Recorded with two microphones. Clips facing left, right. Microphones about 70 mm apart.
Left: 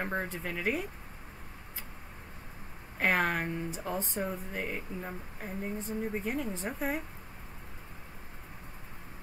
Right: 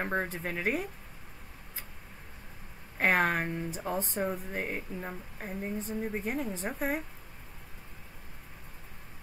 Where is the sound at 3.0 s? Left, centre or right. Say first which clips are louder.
Right 2 dB; centre.